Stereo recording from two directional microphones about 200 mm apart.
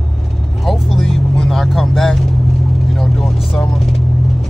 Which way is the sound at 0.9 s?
Centre (ahead or behind).